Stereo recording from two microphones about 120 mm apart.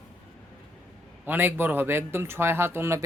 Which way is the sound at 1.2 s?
15° right (ahead or behind).